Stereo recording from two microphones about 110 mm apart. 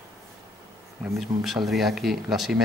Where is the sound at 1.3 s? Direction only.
35° right (ahead or behind).